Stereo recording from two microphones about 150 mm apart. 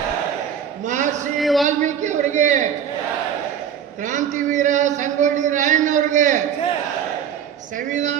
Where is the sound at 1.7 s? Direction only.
55° right (ahead or behind).